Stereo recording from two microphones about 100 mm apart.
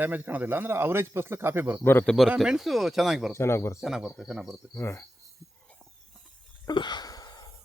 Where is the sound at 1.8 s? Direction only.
20° left (ahead or behind).